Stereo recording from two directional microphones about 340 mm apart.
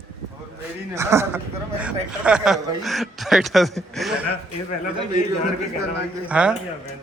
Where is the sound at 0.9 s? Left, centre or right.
Centre.